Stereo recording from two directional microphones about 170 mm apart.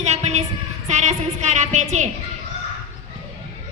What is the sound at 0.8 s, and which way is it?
A woman's voice, 45° right (ahead or behind).